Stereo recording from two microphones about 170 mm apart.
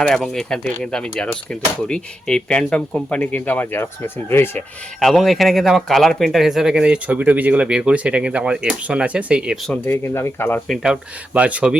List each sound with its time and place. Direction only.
0.0 s speech: 5° left (ahead or behind)
4.9 s speech: centre (ahead or behind)
9.8 s speech: 15° left (ahead or behind)
11.3 s speech: 10° right (ahead or behind)